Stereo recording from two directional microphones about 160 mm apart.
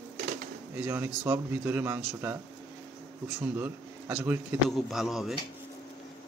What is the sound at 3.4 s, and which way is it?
A man's voice, 10° right (ahead or behind).